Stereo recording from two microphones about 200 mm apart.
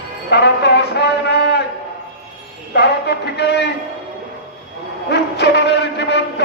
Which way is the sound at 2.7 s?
55° left (ahead or behind).